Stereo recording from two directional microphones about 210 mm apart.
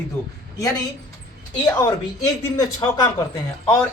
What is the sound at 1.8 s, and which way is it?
Speech, 15° left (ahead or behind).